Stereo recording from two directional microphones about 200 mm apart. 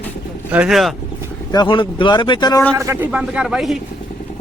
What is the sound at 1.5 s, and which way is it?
Speech, 25° left (ahead or behind).